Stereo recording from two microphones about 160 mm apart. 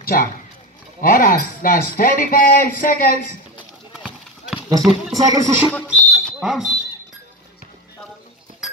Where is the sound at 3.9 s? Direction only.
5° right (ahead or behind).